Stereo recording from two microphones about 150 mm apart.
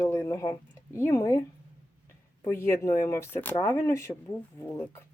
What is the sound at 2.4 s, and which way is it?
Speech, 15° left (ahead or behind).